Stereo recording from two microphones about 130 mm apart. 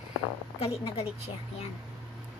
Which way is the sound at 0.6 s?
50° left (ahead or behind).